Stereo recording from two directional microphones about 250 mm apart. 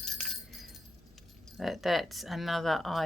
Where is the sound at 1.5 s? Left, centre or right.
Centre.